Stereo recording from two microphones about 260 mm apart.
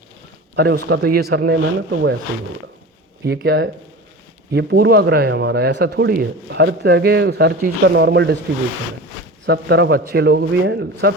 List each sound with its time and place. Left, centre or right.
0.5 s speech: right
3.2 s speech: right
9.5 s speech: right